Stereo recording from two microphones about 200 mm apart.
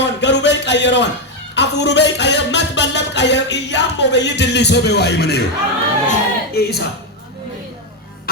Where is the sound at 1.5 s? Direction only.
60° left (ahead or behind).